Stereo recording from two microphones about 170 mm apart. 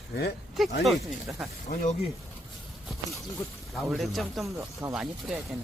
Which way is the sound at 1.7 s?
55° left (ahead or behind).